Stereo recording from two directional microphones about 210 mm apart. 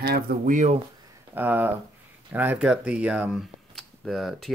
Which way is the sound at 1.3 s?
10° right (ahead or behind).